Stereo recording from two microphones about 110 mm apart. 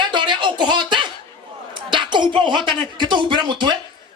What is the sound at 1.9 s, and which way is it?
Speech, 45° right (ahead or behind).